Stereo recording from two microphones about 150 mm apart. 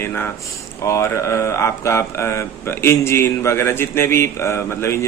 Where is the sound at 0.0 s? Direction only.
15° left (ahead or behind).